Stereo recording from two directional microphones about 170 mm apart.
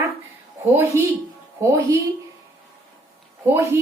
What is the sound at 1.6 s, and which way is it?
Speech, 20° right (ahead or behind).